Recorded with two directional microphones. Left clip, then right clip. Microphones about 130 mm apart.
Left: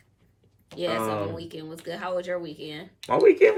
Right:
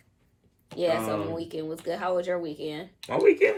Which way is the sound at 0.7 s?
25° right (ahead or behind).